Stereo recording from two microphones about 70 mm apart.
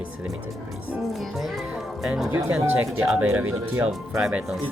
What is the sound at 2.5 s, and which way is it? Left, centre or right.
Speech, right.